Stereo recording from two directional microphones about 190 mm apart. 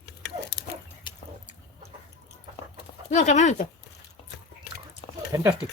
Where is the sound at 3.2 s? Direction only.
40° left (ahead or behind).